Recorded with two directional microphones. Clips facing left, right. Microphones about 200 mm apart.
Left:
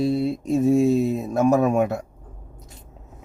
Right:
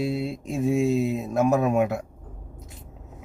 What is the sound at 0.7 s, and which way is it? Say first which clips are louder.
Speech: left 4 dB; 40° left (ahead or behind).